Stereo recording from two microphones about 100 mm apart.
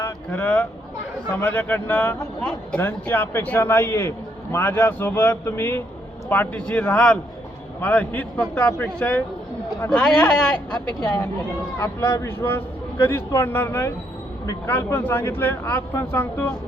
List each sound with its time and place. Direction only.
0.3 s a man's voice: 15° left (ahead or behind)
9.9 s a man's voice: 5° left (ahead or behind)
11.8 s a man's voice: 30° left (ahead or behind)